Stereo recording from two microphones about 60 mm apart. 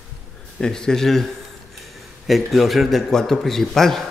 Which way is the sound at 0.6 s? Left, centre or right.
Centre.